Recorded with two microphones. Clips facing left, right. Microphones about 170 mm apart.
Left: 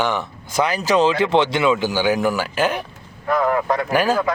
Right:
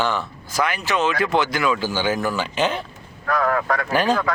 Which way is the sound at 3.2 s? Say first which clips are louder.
Left 2 dB; 20° left (ahead or behind).